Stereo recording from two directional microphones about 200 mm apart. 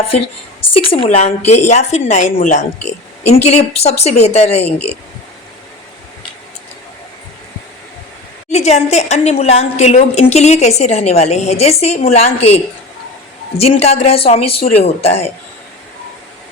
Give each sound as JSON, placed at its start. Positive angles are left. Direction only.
{"t": 0.7, "sound": "a woman's voice", "side_deg": 30}
{"t": 8.4, "sound": "a woman's voice", "side_deg": 35}
{"t": 13.6, "sound": "a woman's voice", "side_deg": 30}